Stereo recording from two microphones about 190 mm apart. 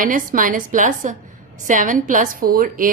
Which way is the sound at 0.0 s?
45° right (ahead or behind).